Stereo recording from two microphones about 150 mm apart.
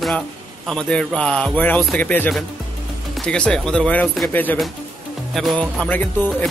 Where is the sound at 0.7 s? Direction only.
5° left (ahead or behind).